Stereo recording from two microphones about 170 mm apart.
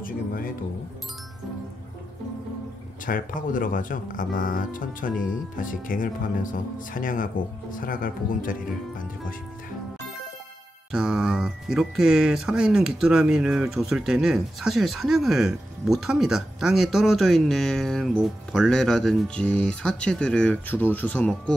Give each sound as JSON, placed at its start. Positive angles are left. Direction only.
{"t": 0.0, "sound": "speech", "side_deg": 55}
{"t": 3.1, "sound": "speech", "side_deg": 55}
{"t": 10.9, "sound": "speech", "side_deg": -5}